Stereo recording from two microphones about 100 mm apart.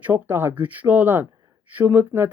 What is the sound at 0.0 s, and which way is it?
Speech, 20° right (ahead or behind).